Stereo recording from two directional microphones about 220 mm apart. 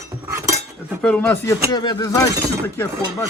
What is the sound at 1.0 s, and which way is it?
Speech, 5° left (ahead or behind).